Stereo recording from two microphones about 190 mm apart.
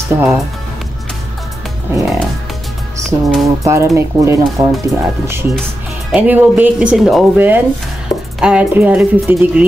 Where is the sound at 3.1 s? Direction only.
15° right (ahead or behind).